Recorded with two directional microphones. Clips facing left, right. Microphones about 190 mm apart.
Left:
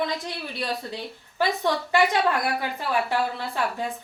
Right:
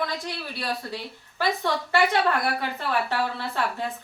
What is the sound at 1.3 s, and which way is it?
Speech, 15° left (ahead or behind).